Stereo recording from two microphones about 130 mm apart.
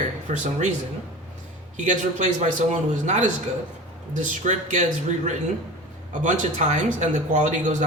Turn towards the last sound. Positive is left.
turn(degrees=-70)  # may be behind; listen again after turning